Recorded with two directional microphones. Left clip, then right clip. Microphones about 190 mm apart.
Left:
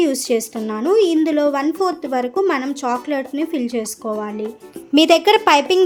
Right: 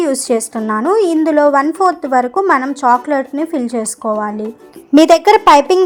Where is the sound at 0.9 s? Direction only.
15° right (ahead or behind).